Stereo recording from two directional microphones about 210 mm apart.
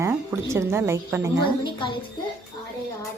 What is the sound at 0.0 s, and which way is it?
A woman's voice, 10° right (ahead or behind).